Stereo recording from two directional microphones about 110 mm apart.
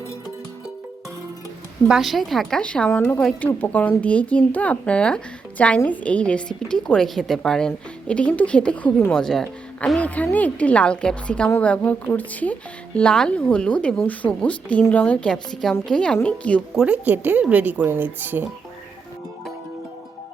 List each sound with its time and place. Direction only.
1.9 s speech: centre (ahead or behind)
16.7 s speech: 10° right (ahead or behind)